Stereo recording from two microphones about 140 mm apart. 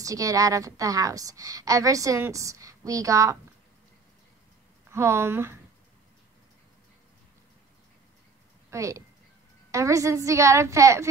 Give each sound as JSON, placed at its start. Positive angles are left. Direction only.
{"t": 0.0, "sound": "a woman's voice", "side_deg": -25}
{"t": 4.9, "sound": "speech", "side_deg": -20}
{"t": 8.6, "sound": "a woman's voice", "side_deg": -20}